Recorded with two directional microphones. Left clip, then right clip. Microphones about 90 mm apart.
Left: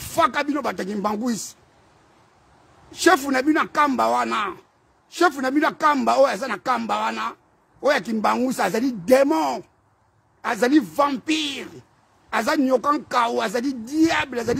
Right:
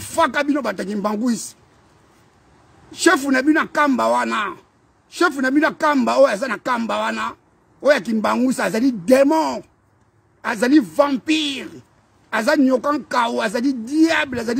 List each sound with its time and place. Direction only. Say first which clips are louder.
0.0 s a sound: right 2 dB; 20° left (ahead or behind)
0.3 s a man's voice: right 4 dB; 5° left (ahead or behind)
0.6 s a man's voice: right 2 dB; 20° left (ahead or behind)
2.9 s a man's voice: right 2 dB; 20° left (ahead or behind)
5.1 s a man's voice: right 2 dB; 20° left (ahead or behind)
6.0 s speech: right 3 dB; 5° left (ahead or behind)
7.8 s a man's voice: right 3 dB; 15° left (ahead or behind)
10.4 s a man's voice: right 3 dB; 15° left (ahead or behind)
11.2 s speech: right 4 dB; 5° left (ahead or behind)
12.4 s a man's voice: right 3 dB; 20° left (ahead or behind)
13.1 s speech: right 4 dB; 5° left (ahead or behind)
13.5 s a man's voice: right 4 dB; 15° left (ahead or behind)
14.0 s speech: right 2 dB; 5° left (ahead or behind)